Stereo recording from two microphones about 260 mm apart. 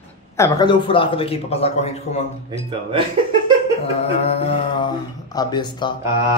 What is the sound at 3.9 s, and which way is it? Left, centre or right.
A man's voice, left.